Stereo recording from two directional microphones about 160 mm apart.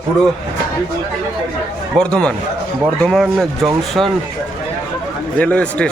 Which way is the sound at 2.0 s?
5° left (ahead or behind).